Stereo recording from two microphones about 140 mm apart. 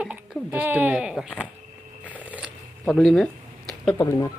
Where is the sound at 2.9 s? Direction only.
5° left (ahead or behind).